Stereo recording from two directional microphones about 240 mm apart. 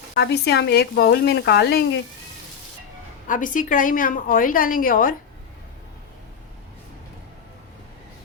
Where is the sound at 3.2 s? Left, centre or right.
Left.